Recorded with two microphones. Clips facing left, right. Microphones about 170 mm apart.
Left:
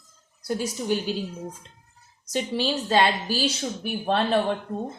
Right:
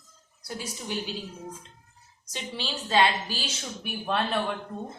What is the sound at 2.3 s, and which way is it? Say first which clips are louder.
A woman's voice: left 10 dB; 45° left (ahead or behind).